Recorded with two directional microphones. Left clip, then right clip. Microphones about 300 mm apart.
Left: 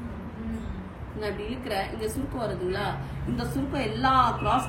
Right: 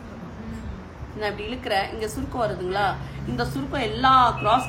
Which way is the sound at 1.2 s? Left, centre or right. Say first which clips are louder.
Right 4 dB; centre.